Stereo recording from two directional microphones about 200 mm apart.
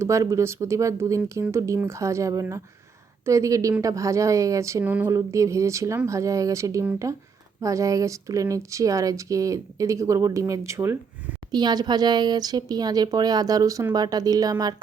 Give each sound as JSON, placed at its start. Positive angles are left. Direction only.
{"t": 0.0, "sound": "a woman's voice", "side_deg": -15}